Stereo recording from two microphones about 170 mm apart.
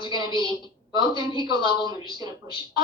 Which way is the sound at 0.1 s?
25° right (ahead or behind).